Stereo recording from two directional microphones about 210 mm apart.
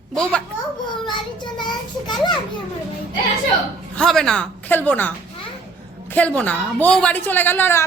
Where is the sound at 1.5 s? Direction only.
20° left (ahead or behind).